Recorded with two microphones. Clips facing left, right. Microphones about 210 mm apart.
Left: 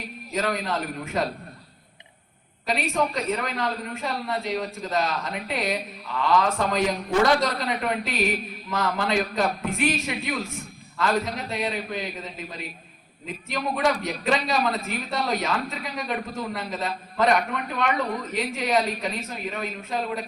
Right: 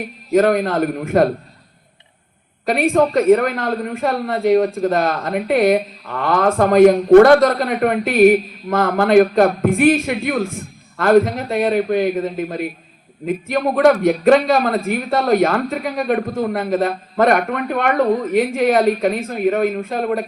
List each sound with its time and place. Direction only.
0.0 s a man's voice: 55° right (ahead or behind)
2.6 s a man's voice: 55° right (ahead or behind)